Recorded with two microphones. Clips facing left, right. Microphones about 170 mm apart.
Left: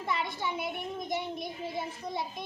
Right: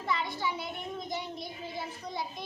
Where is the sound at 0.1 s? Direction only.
20° left (ahead or behind).